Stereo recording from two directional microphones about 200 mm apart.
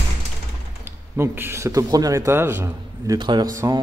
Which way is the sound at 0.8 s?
10° right (ahead or behind).